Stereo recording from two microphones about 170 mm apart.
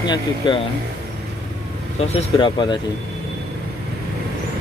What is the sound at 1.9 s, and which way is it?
Speech, 30° left (ahead or behind).